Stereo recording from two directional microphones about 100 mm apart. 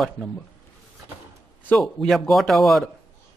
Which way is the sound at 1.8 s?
Centre (ahead or behind).